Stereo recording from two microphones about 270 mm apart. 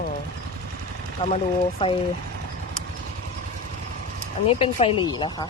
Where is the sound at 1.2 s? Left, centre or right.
Left.